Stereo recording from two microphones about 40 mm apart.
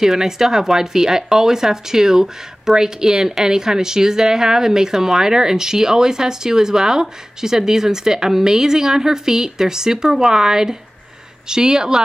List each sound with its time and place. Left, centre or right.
0.0 s speech: centre